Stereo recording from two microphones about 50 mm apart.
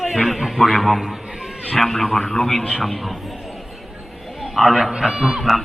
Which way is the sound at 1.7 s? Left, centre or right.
Centre.